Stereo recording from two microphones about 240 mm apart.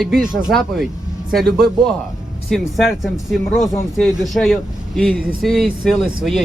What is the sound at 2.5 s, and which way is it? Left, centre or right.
A man's voice, centre.